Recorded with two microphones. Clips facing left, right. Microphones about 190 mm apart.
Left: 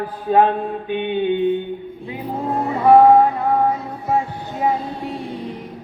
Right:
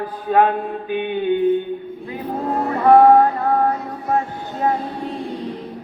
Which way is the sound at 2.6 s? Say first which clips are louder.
Even; 10° left (ahead or behind).